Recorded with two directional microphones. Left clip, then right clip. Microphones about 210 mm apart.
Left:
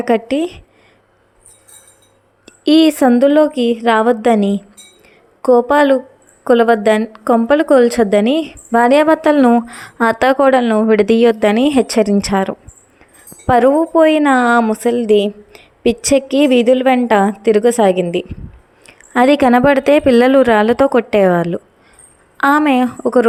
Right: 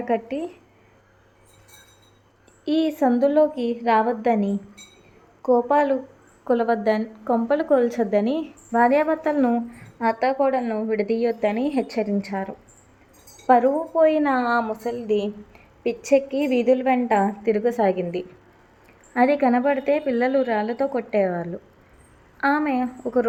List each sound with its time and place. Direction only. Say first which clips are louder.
0.0 s a woman's voice: left 10 dB; 45° left (ahead or behind)
2.5 s a woman's voice: left 12 dB; 45° left (ahead or behind)
9.7 s a woman's voice: left 9 dB; 50° left (ahead or behind)
19.1 s a woman's voice: left 8 dB; 45° left (ahead or behind)